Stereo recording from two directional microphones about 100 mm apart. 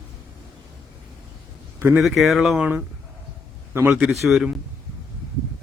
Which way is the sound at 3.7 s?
20° right (ahead or behind).